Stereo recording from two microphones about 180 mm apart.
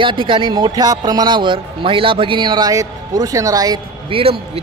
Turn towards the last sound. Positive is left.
turn(degrees=-30)  # may be behind; listen again after turning